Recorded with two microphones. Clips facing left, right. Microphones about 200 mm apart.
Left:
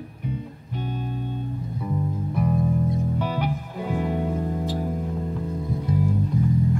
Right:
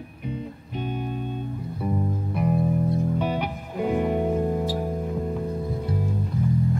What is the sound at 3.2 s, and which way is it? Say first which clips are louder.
Music: even; 20° right (ahead or behind).